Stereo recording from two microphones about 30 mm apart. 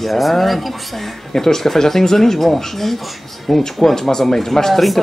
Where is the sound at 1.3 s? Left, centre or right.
Centre.